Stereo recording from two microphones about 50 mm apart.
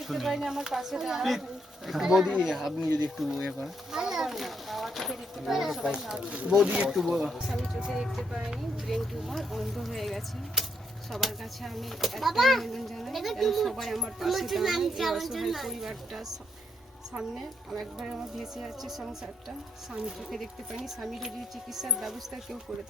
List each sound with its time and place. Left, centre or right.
0.1 s a woman's voice: centre
8.3 s a woman's voice: centre
8.9 s a woman's voice: centre
19.9 s a woman's voice: centre